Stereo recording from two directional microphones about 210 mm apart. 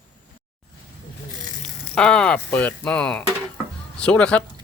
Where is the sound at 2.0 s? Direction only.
5° left (ahead or behind).